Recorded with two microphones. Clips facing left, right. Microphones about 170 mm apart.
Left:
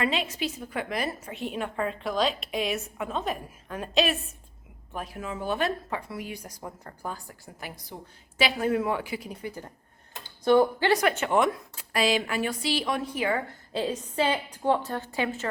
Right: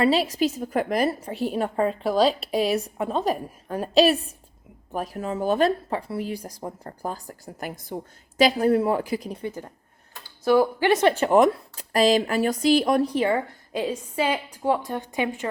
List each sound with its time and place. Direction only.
0.0 s a woman's voice: 35° right (ahead or behind)
9.4 s speech: 20° right (ahead or behind)
10.4 s a woman's voice: 5° right (ahead or behind)
10.9 s a woman's voice: 30° right (ahead or behind)
13.7 s a woman's voice: 10° right (ahead or behind)